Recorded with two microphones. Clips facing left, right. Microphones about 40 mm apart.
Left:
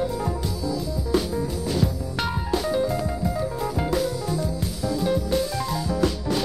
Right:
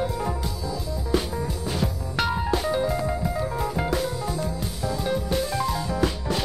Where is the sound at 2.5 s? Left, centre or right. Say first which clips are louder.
Left 1 dB; right.